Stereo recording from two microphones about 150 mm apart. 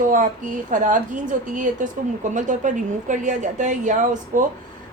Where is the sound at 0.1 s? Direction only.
60° right (ahead or behind).